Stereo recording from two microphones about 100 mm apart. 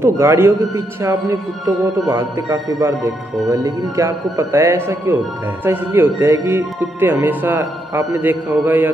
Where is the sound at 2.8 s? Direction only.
30° right (ahead or behind).